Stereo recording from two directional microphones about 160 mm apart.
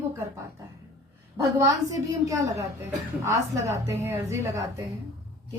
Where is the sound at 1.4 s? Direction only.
20° right (ahead or behind).